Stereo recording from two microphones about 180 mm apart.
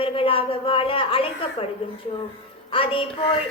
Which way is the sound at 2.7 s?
30° left (ahead or behind).